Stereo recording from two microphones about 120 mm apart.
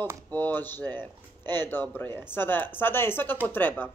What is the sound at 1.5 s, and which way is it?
Speech, 15° left (ahead or behind).